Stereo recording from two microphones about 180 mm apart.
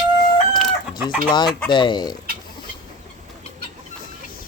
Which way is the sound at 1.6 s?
25° left (ahead or behind).